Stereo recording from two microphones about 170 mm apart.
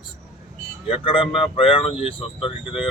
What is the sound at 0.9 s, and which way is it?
Speech, 30° left (ahead or behind).